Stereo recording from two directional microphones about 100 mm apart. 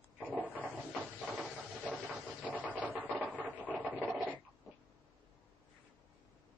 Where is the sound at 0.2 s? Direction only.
15° right (ahead or behind).